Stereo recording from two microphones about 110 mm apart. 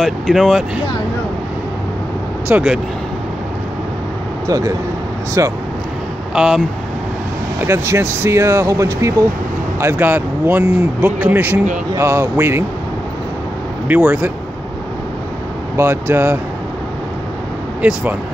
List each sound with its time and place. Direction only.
0.0 s speech: centre (ahead or behind)
2.4 s speech: 10° right (ahead or behind)
4.5 s speech: 30° right (ahead or behind)
6.3 s speech: 5° right (ahead or behind)
7.6 s speech: 25° right (ahead or behind)
13.8 s speech: 15° right (ahead or behind)
15.7 s speech: 20° right (ahead or behind)
17.8 s speech: 10° right (ahead or behind)